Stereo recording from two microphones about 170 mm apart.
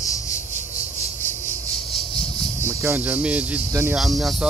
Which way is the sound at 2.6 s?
15° right (ahead or behind).